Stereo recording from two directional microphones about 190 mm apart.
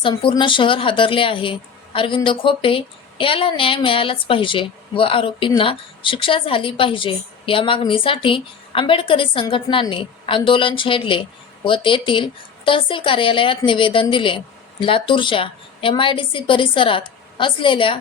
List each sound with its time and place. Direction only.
0.0 s speech: 25° left (ahead or behind)